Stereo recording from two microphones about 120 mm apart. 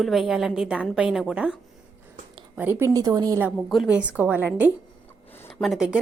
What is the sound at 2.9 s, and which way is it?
Speech, 30° right (ahead or behind).